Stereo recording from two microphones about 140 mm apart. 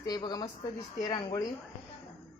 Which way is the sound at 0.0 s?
30° left (ahead or behind).